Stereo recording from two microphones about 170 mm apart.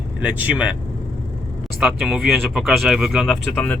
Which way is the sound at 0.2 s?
10° right (ahead or behind).